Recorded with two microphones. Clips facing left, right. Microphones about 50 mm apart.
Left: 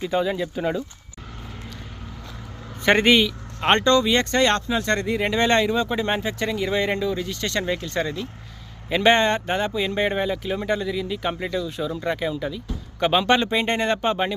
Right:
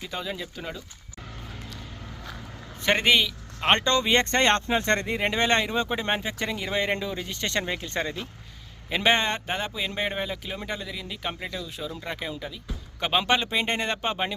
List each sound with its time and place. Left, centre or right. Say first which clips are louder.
0.0 s speech: left 10 dB; centre
2.8 s speech: left 5 dB; centre
3.8 s speech: left 4 dB; right
6.1 s speech: left 4 dB; centre
9.0 s speech: left 5 dB; centre